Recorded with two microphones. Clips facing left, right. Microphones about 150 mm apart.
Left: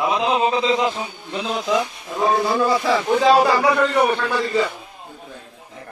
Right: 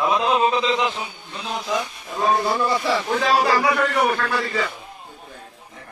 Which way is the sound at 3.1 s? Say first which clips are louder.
Left 6 dB; 20° left (ahead or behind).